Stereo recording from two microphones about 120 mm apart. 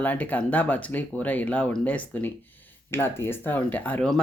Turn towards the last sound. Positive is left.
turn(degrees=15)  # may be behind; listen again after turning